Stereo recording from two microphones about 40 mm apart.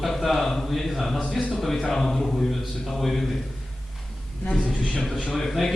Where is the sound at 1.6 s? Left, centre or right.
Centre.